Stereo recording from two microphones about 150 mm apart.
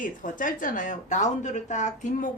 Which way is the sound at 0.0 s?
60° left (ahead or behind).